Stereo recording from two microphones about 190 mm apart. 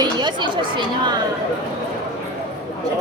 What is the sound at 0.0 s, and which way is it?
Chatter, 25° right (ahead or behind).